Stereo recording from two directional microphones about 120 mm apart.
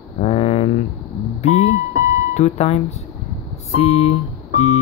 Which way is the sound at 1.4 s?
65° left (ahead or behind).